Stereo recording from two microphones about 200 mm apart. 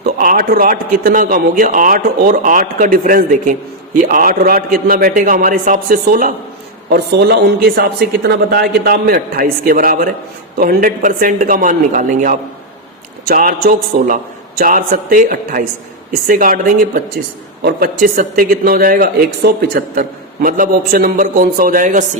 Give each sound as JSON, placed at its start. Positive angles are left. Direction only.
{"t": 0.0, "sound": "a man's voice", "side_deg": -45}